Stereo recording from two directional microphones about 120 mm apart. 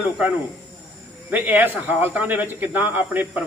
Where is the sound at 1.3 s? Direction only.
15° right (ahead or behind).